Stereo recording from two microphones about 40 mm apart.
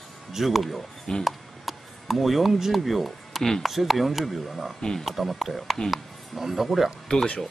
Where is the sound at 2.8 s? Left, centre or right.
Centre.